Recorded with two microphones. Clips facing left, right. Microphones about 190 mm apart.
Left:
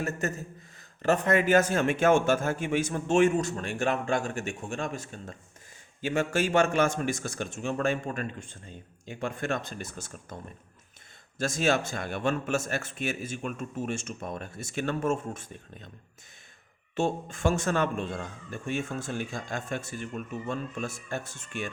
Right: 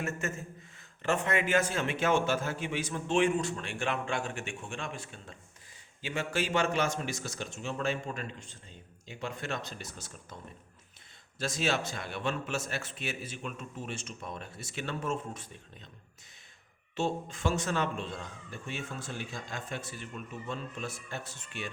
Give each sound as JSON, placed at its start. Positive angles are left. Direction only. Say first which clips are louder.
{"t": 0.0, "sound": "speech", "louder": "left 4 dB", "side_deg": 40}
{"t": 11.3, "sound": "speech", "louder": "left 5 dB", "side_deg": 50}
{"t": 16.9, "sound": "speech", "louder": "left 4 dB", "side_deg": 50}